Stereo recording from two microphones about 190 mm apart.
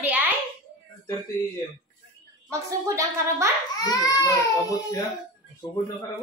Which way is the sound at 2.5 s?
15° right (ahead or behind).